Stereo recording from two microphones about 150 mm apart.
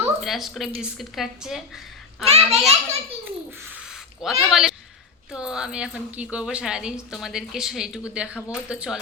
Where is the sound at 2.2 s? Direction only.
45° right (ahead or behind).